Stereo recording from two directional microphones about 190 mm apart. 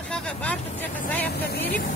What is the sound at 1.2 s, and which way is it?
Speech, 55° left (ahead or behind).